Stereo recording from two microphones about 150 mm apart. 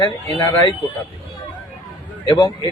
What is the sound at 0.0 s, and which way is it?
Speech, 20° left (ahead or behind).